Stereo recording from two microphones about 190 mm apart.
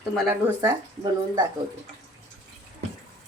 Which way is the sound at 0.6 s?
20° right (ahead or behind).